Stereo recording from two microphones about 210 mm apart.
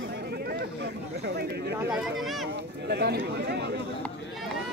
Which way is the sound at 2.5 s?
55° right (ahead or behind).